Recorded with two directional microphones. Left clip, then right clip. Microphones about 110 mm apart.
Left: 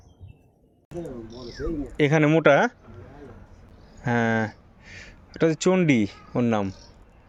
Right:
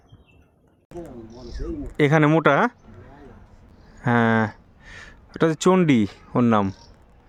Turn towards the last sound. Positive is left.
turn(degrees=-90)